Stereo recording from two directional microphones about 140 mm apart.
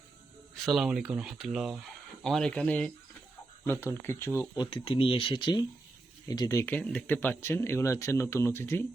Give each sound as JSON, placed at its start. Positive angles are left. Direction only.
{"t": 0.5, "sound": "speech", "side_deg": 0}
{"t": 3.6, "sound": "speech", "side_deg": 20}
{"t": 4.5, "sound": "speech", "side_deg": 35}